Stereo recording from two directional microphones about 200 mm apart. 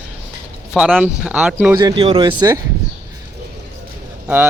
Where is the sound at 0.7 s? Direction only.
Centre (ahead or behind).